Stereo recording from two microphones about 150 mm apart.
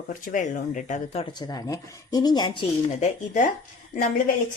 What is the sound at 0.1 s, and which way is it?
A woman's voice, 60° left (ahead or behind).